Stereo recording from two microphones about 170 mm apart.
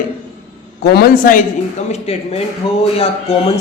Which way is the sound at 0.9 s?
60° left (ahead or behind).